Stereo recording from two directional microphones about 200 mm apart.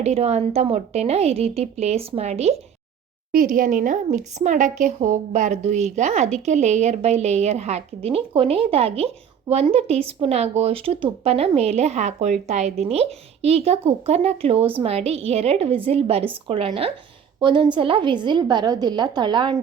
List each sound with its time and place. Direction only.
0.0 s a woman's voice: 30° right (ahead or behind)
3.3 s a woman's voice: 45° right (ahead or behind); by 19.5 s 20° right (ahead or behind)